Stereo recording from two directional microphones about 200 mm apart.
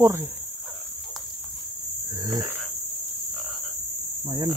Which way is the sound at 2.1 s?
20° right (ahead or behind).